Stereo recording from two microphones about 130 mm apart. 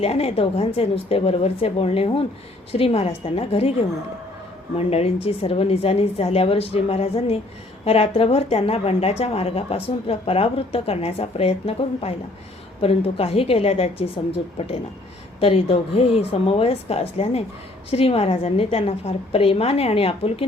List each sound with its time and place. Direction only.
0.0 s speech: 50° left (ahead or behind)
4.8 s speech: 50° left (ahead or behind)
15.4 s speech: 50° left (ahead or behind)